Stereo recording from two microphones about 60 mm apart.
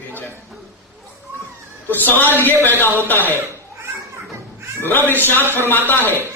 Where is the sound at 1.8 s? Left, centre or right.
Left.